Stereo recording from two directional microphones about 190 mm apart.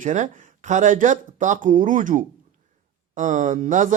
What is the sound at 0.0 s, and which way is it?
Speech, 40° right (ahead or behind).